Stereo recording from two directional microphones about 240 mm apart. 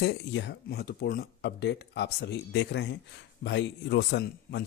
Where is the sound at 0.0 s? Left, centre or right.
Left.